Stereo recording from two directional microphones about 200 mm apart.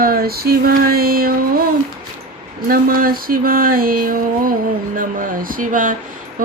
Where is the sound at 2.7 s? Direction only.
45° right (ahead or behind).